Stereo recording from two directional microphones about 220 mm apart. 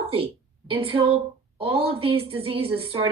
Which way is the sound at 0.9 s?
25° right (ahead or behind).